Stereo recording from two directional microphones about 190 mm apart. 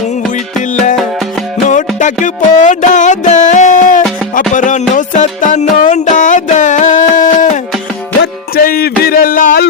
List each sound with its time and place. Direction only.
2.0 s music: 40° left (ahead or behind)
8.2 s music: 55° left (ahead or behind)